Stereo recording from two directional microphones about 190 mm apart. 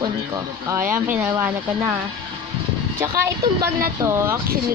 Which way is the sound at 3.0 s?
15° right (ahead or behind).